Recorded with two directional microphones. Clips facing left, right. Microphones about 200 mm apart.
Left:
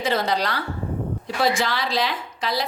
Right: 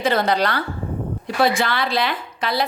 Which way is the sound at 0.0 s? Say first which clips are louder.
Right 4 dB; 55° right (ahead or behind).